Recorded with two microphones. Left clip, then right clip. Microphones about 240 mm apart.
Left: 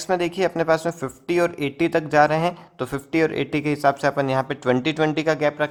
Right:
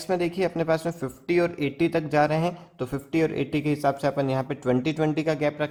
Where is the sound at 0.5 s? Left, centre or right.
Left.